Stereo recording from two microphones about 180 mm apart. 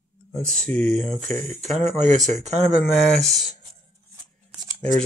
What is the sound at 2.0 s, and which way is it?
Speech, 40° right (ahead or behind).